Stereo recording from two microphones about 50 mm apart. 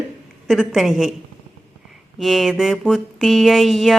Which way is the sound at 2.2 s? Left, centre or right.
Centre.